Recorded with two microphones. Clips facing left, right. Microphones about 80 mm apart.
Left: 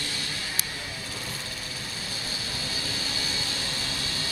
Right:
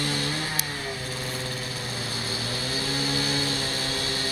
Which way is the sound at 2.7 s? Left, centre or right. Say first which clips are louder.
Right 9 dB; right.